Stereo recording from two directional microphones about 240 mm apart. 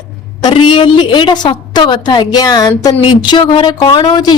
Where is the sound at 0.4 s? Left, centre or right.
Centre.